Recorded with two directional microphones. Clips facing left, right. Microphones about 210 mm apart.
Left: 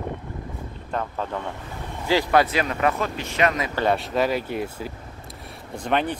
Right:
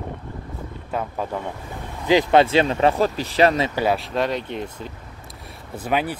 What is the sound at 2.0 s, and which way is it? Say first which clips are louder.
Speech: right 4 dB; 20° right (ahead or behind).